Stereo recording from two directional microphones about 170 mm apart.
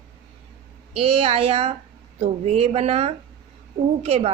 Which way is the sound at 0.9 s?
35° right (ahead or behind).